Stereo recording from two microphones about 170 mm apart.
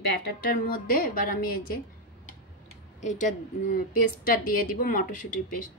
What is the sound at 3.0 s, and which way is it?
Speech, 45° left (ahead or behind).